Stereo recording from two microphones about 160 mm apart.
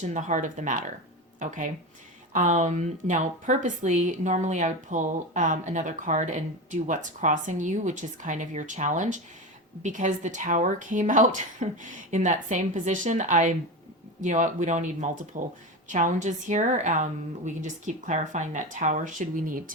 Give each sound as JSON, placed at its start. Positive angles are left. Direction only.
{"t": 0.0, "sound": "a woman's voice", "side_deg": -50}